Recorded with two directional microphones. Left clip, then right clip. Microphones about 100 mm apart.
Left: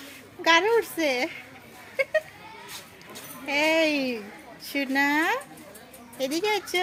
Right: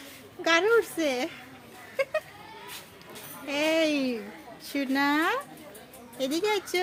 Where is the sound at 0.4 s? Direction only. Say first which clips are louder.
Left 2 dB; 20° right (ahead or behind).